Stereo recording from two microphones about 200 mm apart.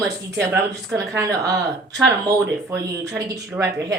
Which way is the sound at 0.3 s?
10° right (ahead or behind).